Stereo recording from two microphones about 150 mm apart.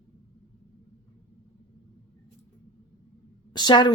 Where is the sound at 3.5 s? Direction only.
30° left (ahead or behind).